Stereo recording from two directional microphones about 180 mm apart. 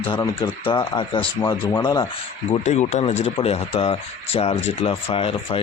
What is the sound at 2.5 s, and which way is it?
Speech, 40° left (ahead or behind).